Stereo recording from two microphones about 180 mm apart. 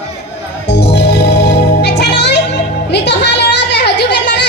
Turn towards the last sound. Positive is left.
turn(degrees=70)  # may be behind; listen again after turning